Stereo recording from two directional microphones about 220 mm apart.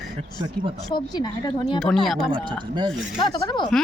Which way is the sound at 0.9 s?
20° left (ahead or behind).